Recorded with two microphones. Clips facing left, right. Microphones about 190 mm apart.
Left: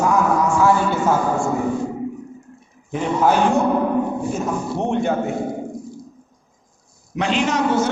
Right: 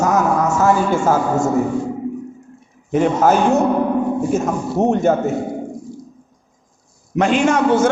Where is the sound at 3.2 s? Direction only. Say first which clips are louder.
Even; 45° right (ahead or behind).